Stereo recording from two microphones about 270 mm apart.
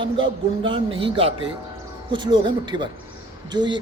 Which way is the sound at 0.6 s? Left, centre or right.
Centre.